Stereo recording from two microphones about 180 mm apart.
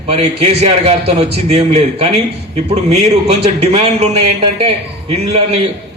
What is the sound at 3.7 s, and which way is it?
Speech, 35° right (ahead or behind).